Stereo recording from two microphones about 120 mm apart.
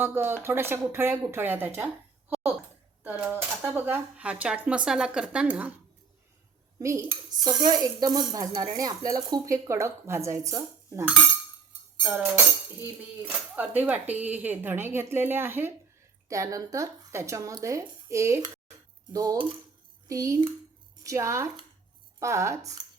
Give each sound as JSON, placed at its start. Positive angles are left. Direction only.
{"t": 0.0, "sound": "speech", "side_deg": -20}
{"t": 3.0, "sound": "speech", "side_deg": -15}
{"t": 6.7, "sound": "speech", "side_deg": -25}
{"t": 12.0, "sound": "speech", "side_deg": -10}